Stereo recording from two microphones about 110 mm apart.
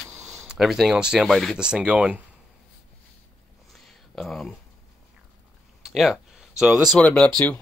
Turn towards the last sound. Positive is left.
turn(degrees=15)  # may be behind; listen again after turning